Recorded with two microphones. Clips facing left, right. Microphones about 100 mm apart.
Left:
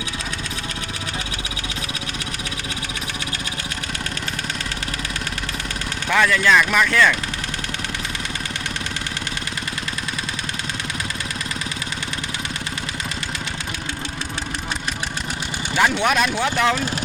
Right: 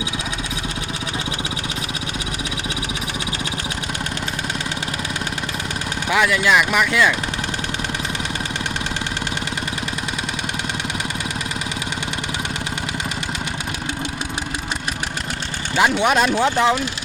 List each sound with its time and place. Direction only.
6.1 s speech: 15° right (ahead or behind)
15.7 s speech: 20° right (ahead or behind)